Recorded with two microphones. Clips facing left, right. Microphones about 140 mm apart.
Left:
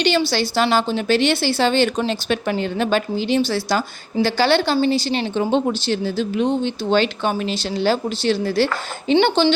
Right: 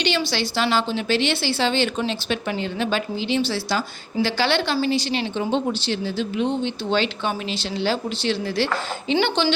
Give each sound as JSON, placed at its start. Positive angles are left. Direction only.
{"t": 0.0, "sound": "a woman's voice", "side_deg": 40}
{"t": 5.5, "sound": "a woman's voice", "side_deg": 50}